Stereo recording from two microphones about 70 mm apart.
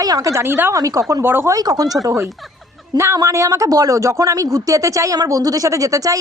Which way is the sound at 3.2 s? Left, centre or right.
Right.